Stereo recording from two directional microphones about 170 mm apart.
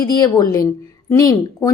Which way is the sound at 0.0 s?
25° left (ahead or behind).